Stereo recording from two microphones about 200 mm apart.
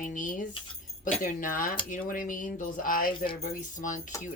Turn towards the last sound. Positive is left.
turn(degrees=40)  # may be behind; listen again after turning